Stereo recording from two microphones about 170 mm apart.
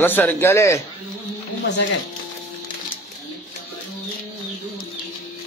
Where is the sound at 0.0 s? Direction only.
10° left (ahead or behind).